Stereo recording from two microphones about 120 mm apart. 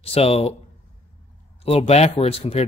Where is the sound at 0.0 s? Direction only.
55° left (ahead or behind).